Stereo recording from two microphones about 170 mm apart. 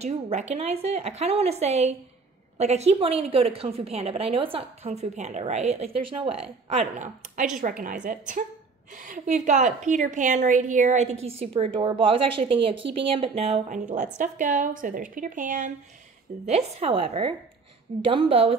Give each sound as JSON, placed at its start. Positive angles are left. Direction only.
{"t": 0.0, "sound": "a woman's voice", "side_deg": -40}
{"t": 16.4, "sound": "a woman's voice", "side_deg": -40}